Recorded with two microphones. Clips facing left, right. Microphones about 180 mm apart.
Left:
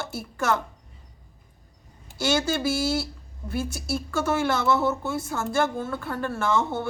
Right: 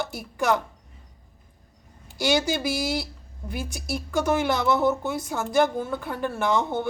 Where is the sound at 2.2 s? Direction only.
15° right (ahead or behind).